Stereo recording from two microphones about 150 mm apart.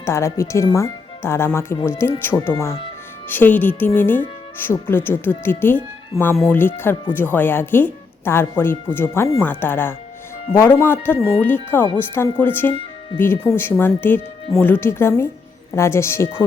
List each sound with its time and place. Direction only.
0.0 s speech: 20° left (ahead or behind)